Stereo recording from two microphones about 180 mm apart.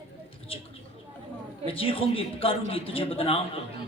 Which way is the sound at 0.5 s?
30° left (ahead or behind).